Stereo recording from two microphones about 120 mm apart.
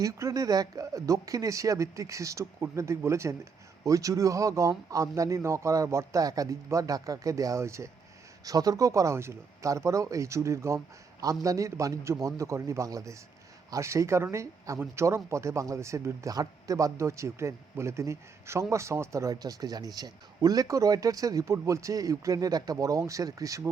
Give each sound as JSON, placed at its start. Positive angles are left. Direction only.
{"t": 0.0, "sound": "speech", "side_deg": -25}